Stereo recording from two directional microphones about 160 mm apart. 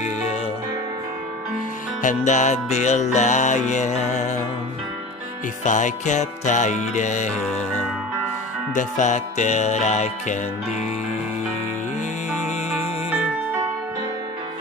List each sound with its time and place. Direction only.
2.0 s music: 50° left (ahead or behind)
5.6 s music: 50° left (ahead or behind)
7.3 s music: centre (ahead or behind)
8.7 s music: 50° left (ahead or behind)